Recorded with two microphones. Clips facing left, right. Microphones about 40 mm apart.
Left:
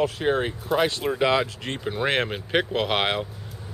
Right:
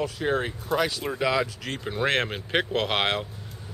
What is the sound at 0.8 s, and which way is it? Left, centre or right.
Speech, left.